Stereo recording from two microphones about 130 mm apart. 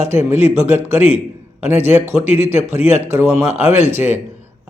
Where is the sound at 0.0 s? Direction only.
20° right (ahead or behind).